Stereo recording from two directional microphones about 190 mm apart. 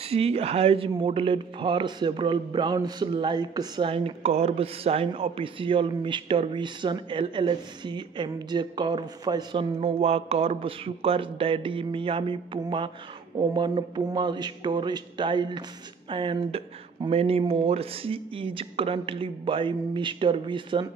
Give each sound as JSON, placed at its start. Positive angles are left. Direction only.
{"t": 0.1, "sound": "speech", "side_deg": -30}